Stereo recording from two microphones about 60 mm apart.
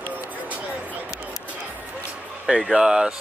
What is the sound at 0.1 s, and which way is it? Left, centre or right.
Music, right.